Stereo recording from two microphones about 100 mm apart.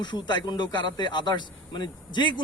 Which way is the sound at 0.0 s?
50° left (ahead or behind).